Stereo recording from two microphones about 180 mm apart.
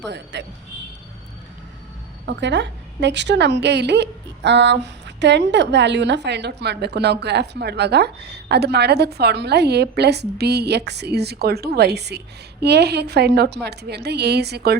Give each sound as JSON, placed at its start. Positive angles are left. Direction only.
{"t": 0.1, "sound": "a woman's voice", "side_deg": -75}
{"t": 2.2, "sound": "a woman's voice", "side_deg": -75}